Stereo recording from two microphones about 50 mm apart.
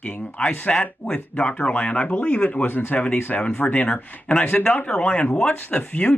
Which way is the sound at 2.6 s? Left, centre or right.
Left.